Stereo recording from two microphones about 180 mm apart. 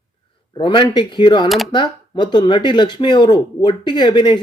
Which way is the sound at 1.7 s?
25° left (ahead or behind).